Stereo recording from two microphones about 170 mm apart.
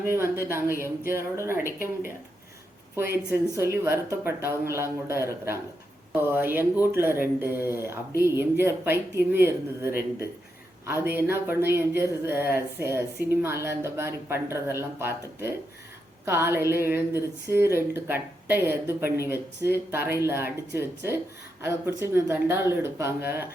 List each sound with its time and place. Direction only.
0.0 s speech: 15° right (ahead or behind)
3.2 s speech: 15° right (ahead or behind)